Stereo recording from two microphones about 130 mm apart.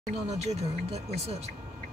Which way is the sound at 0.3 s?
55° right (ahead or behind).